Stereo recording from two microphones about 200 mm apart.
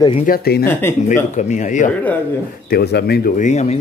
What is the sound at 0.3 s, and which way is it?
Speech, 50° left (ahead or behind).